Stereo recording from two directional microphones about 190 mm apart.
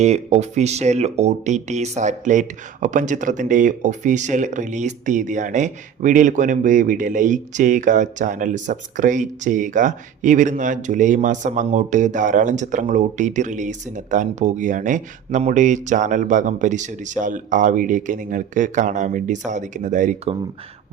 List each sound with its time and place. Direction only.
0.0 s speech: 35° right (ahead or behind)